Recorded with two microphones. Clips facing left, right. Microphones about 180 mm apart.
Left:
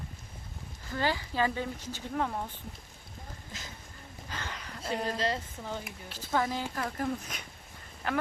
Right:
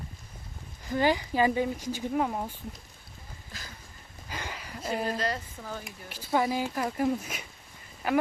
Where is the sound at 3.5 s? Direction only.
20° left (ahead or behind).